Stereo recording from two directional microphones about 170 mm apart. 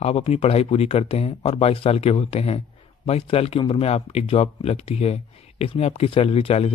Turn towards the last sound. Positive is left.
turn(degrees=35)  # may be behind; listen again after turning